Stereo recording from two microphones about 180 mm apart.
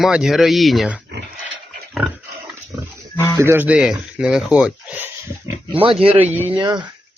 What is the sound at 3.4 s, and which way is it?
Speech, 10° right (ahead or behind).